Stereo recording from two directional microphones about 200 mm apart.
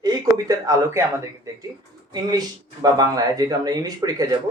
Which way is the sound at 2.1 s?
20° right (ahead or behind).